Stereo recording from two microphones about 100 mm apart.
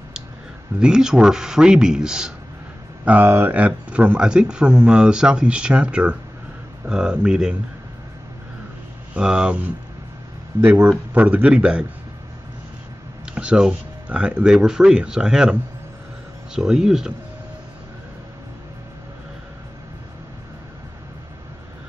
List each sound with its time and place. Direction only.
0.7 s speech: 10° right (ahead or behind)
3.1 s speech: 20° right (ahead or behind)
9.1 s speech: 10° right (ahead or behind)
13.2 s speech: 10° right (ahead or behind)
16.5 s speech: 5° right (ahead or behind)